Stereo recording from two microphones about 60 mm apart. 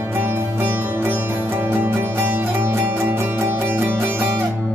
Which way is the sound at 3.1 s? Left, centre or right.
Right.